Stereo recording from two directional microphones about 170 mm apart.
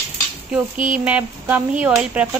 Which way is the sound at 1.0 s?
10° right (ahead or behind).